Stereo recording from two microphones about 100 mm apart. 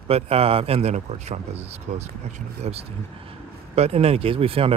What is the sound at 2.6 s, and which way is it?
Speech, 90° right.